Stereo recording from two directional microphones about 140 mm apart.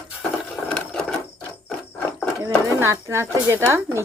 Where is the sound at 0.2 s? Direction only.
5° left (ahead or behind).